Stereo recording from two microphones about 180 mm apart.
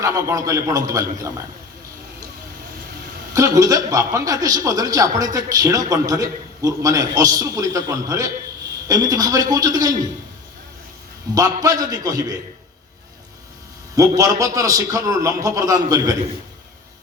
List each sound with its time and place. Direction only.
0.0 s a man's voice: 15° right (ahead or behind)
3.3 s a man's voice: 20° right (ahead or behind)
11.6 s a man's voice: 20° right (ahead or behind)
14.2 s a man's voice: 20° right (ahead or behind)